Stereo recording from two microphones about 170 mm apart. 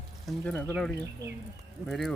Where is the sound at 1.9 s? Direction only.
Centre (ahead or behind).